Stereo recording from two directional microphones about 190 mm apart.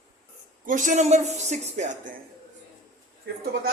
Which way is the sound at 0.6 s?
40° right (ahead or behind).